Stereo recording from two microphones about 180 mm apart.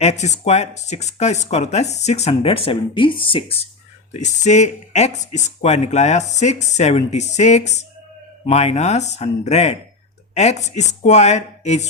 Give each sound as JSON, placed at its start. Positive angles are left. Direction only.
{"t": 0.0, "sound": "speech", "side_deg": 40}